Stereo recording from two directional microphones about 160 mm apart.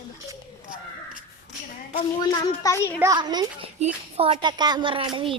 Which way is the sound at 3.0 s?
25° right (ahead or behind).